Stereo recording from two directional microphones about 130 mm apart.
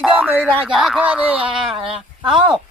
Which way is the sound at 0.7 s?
Centre (ahead or behind).